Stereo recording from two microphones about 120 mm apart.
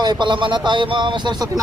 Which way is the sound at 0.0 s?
40° right (ahead or behind).